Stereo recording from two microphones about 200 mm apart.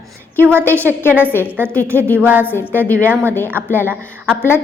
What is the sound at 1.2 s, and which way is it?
Speech, 10° left (ahead or behind).